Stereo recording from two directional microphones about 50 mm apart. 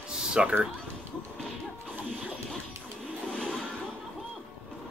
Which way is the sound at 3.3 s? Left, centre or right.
Centre.